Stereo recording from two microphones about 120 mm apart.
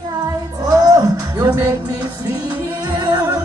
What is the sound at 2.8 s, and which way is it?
Music, 35° right (ahead or behind).